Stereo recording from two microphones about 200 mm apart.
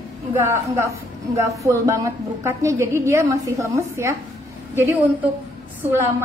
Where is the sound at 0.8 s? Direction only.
15° right (ahead or behind).